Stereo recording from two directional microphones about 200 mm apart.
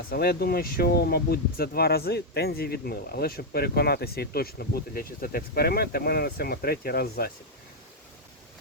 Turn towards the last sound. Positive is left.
turn(degrees=50)  # may be behind; listen again after turning